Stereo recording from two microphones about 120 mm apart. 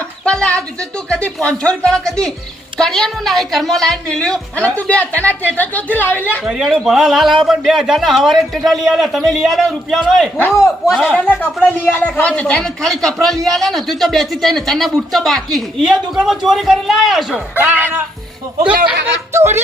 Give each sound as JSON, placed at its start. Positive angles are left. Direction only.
{"t": 0.3, "sound": "a woman's voice", "side_deg": 10}
{"t": 6.4, "sound": "a woman's voice", "side_deg": 0}
{"t": 10.3, "sound": "a man's voice", "side_deg": 20}
{"t": 10.9, "sound": "a woman's voice", "side_deg": 5}
{"t": 17.6, "sound": "speech", "side_deg": -15}
{"t": 19.3, "sound": "speech", "side_deg": -20}